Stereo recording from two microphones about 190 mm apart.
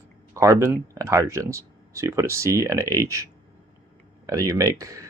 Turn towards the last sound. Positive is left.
turn(degrees=-15)  # may be behind; listen again after turning